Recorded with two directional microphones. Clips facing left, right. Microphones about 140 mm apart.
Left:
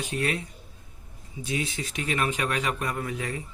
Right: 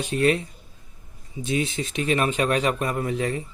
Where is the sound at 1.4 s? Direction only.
25° right (ahead or behind).